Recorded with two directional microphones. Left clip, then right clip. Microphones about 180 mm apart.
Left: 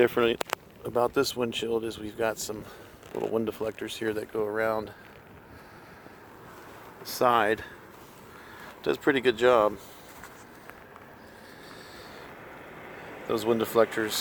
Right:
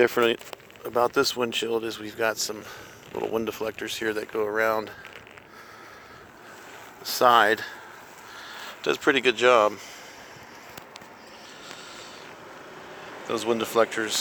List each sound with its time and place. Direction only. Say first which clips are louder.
0.0 s speech: right 2 dB; centre (ahead or behind)
7.2 s speech: right 5 dB; centre (ahead or behind)
8.8 s speech: right 3 dB; 10° left (ahead or behind)
13.2 s speech: even; 20° left (ahead or behind)